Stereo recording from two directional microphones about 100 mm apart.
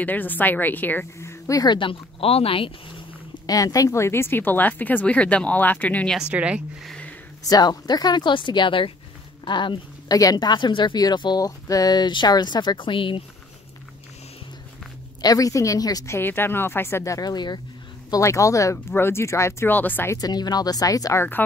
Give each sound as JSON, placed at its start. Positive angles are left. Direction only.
{"t": 0.0, "sound": "speech", "side_deg": 15}
{"t": 1.5, "sound": "speech", "side_deg": 40}
{"t": 1.8, "sound": "speech", "side_deg": 65}
{"t": 3.4, "sound": "speech", "side_deg": 35}
{"t": 6.1, "sound": "a woman's voice", "side_deg": -10}
{"t": 7.4, "sound": "speech", "side_deg": 40}
{"t": 10.1, "sound": "speech", "side_deg": 40}
{"t": 15.2, "sound": "speech", "side_deg": 35}
{"t": 16.2, "sound": "speech", "side_deg": 20}
{"t": 18.1, "sound": "speech", "side_deg": 30}
{"t": 20.2, "sound": "speech", "side_deg": 40}